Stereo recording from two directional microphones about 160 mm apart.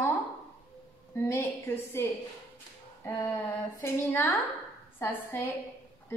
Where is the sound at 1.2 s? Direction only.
15° left (ahead or behind).